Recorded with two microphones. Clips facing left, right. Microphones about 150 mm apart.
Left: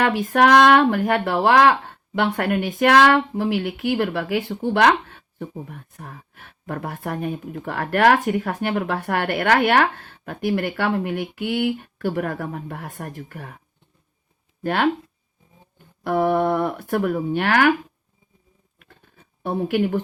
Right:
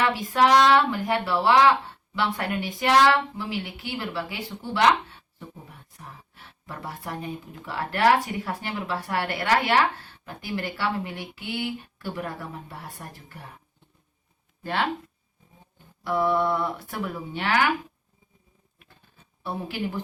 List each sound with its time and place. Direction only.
0.0 s speech: 55° left (ahead or behind)
14.6 s speech: 55° left (ahead or behind)
16.0 s speech: 55° left (ahead or behind)
18.8 s a sound: 60° left (ahead or behind)